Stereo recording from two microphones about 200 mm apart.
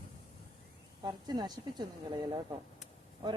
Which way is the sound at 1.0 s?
20° right (ahead or behind).